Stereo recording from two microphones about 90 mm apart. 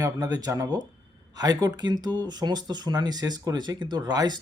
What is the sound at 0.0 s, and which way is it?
Speech, 45° right (ahead or behind).